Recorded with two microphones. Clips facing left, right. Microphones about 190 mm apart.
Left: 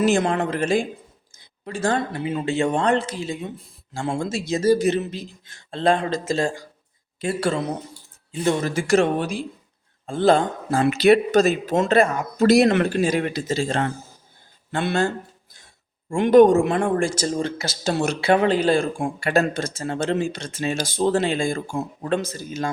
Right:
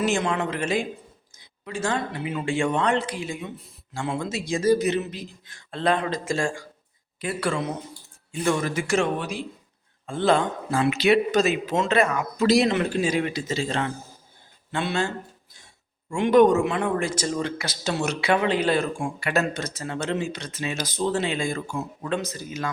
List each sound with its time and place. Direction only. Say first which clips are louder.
0.0 s speech: left 4 dB; 40° left (ahead or behind)
1.6 s speech: left 4 dB; 35° left (ahead or behind)
2.7 s speech: left 3 dB; 35° left (ahead or behind)
3.9 s speech: left 3 dB; 45° left (ahead or behind)
4.5 s speech: left 2 dB; 30° left (ahead or behind)
8.4 s speech: left 3 dB; 25° left (ahead or behind); by 11.9 s 45° left (ahead or behind)
11.9 s speech: left 4 dB; 35° left (ahead or behind)
12.5 s speech: left 4 dB; 55° left (ahead or behind)
16.1 s speech: left 4 dB; 45° left (ahead or behind)
18.1 s speech: left 4 dB; 30° left (ahead or behind); by 19.1 s 50° left (ahead or behind)
19.2 s speech: left 5 dB; 30° left (ahead or behind)
21.0 s speech: left 4 dB; 40° left (ahead or behind)